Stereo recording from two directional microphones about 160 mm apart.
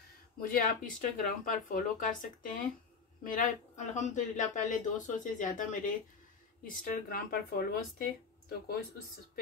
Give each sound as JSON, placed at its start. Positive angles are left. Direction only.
{"t": 0.4, "sound": "speech", "side_deg": 60}
{"t": 6.8, "sound": "speech", "side_deg": 65}